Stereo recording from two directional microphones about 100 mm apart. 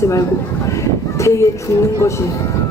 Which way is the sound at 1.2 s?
30° left (ahead or behind).